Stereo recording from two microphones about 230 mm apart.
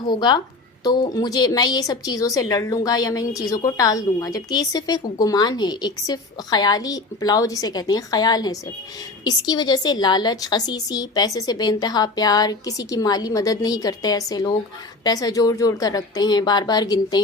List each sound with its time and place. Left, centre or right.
0.1 s a woman's voice: centre